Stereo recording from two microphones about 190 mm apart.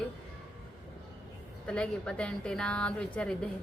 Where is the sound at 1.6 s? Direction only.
5° left (ahead or behind).